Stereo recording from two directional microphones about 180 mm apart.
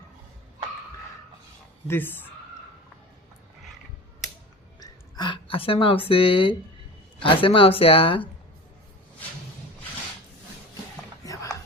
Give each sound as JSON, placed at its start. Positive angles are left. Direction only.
{"t": 1.9, "sound": "speech", "side_deg": 10}
{"t": 4.8, "sound": "a woman's voice", "side_deg": 25}